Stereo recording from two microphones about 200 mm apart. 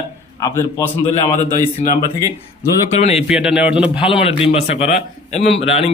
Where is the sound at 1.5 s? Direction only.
45° left (ahead or behind).